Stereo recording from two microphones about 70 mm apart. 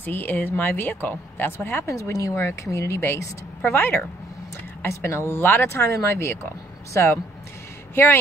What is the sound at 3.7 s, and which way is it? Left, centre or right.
Speech, left.